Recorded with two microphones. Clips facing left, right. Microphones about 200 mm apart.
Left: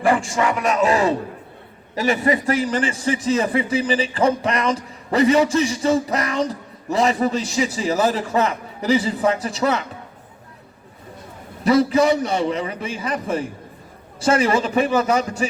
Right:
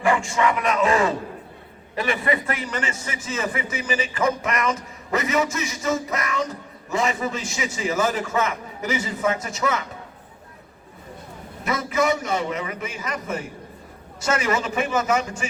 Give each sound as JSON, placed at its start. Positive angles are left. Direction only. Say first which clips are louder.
{"t": 0.0, "sound": "a man's voice", "louder": "left 2 dB", "side_deg": 35}
{"t": 11.6, "sound": "a man's voice", "louder": "left 7 dB", "side_deg": 35}